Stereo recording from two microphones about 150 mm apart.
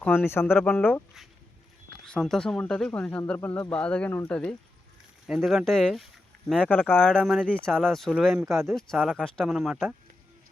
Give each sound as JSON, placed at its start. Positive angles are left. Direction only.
{"t": 0.3, "sound": "speech", "side_deg": 15}
{"t": 0.6, "sound": "speech", "side_deg": 0}
{"t": 2.0, "sound": "speech", "side_deg": 5}
{"t": 9.2, "sound": "speech", "side_deg": 5}